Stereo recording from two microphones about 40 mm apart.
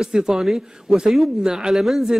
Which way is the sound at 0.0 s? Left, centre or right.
Centre.